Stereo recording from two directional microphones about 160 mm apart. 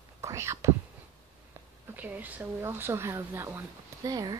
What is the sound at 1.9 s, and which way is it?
Speech, 10° right (ahead or behind).